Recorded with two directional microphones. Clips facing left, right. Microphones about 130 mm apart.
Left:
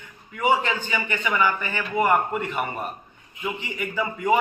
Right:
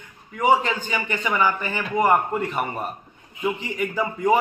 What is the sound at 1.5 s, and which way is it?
A man's voice, 30° right (ahead or behind).